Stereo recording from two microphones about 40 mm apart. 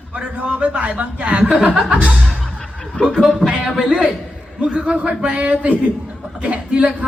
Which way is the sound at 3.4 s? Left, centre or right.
Right.